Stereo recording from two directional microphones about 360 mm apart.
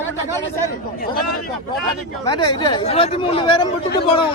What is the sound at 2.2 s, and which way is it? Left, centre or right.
Speech, centre.